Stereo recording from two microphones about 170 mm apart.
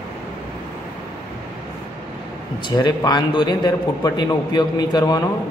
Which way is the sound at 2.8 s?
25° left (ahead or behind).